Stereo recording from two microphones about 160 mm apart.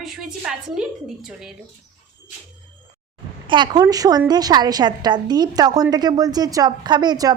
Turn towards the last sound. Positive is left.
turn(degrees=-25)  # may be behind; listen again after turning